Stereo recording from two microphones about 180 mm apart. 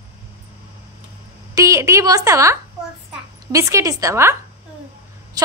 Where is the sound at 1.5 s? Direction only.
20° right (ahead or behind).